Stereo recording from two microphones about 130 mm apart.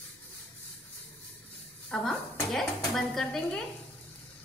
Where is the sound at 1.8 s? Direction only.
5° left (ahead or behind).